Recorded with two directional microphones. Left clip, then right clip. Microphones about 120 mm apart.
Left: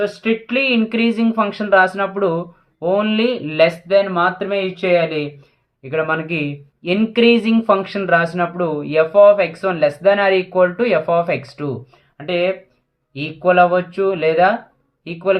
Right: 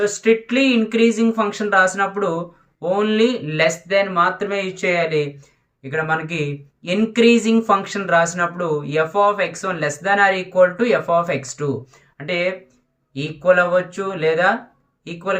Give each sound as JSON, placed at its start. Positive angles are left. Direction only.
{"t": 0.0, "sound": "speech", "side_deg": 40}